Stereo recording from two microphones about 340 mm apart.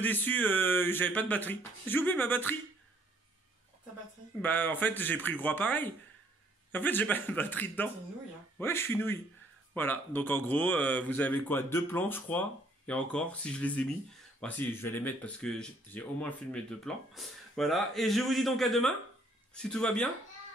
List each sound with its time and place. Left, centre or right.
0.0 s speech: centre
4.4 s speech: centre